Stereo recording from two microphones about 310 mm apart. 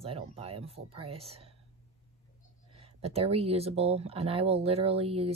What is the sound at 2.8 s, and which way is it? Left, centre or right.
Speech, centre.